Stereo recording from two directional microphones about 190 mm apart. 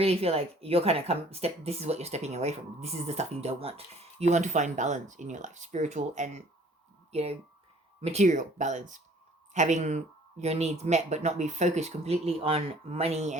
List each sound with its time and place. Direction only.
0.0 s speech: 30° right (ahead or behind)